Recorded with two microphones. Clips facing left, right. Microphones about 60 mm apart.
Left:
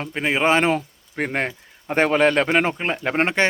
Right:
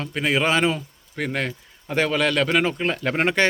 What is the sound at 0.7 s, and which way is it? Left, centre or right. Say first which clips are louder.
Speech: left 4 dB; left.